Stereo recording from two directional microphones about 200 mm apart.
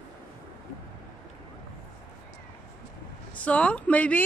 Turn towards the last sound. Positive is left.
turn(degrees=5)  # may be behind; listen again after turning